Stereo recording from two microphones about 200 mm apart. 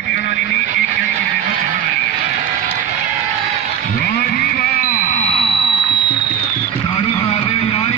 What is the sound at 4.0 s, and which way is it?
Music, 50° left (ahead or behind).